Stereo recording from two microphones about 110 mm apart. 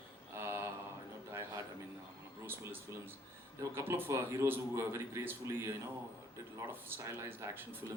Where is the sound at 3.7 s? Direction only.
25° right (ahead or behind).